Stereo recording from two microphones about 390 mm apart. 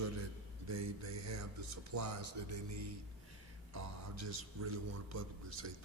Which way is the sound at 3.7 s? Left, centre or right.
Right.